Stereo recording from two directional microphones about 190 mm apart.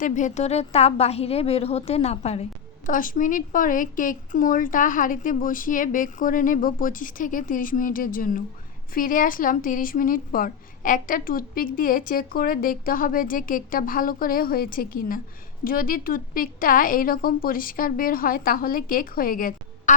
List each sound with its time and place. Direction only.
0.0 s a woman's voice: 40° left (ahead or behind)